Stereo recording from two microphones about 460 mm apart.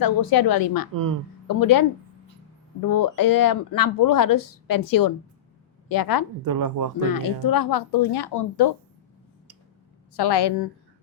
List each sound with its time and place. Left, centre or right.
0.0 s speech: left
6.4 s speech: right
7.1 s speech: left
10.2 s a woman's voice: left